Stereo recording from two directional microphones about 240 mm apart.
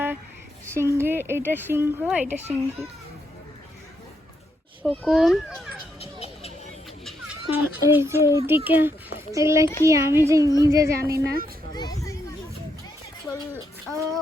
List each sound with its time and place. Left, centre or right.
0.7 s a woman's voice: centre
4.8 s speech: centre
6.0 s music: left
7.0 s a child's voice: centre
11.7 s a sound: centre
13.9 s speech: centre